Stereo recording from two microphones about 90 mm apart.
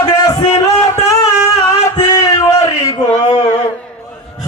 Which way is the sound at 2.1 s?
40° left (ahead or behind).